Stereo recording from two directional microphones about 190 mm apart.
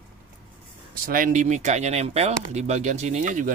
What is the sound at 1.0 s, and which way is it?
Speech, 45° right (ahead or behind).